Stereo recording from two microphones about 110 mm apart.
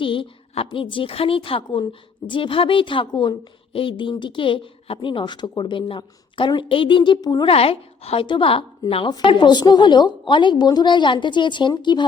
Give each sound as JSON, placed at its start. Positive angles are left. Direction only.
{"t": 0.0, "sound": "a woman's voice", "side_deg": 50}
{"t": 7.4, "sound": "a woman's voice", "side_deg": 60}